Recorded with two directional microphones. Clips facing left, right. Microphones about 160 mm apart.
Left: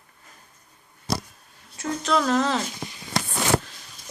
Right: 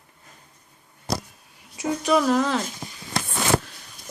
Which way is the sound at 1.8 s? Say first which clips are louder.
Right 3 dB; 10° right (ahead or behind).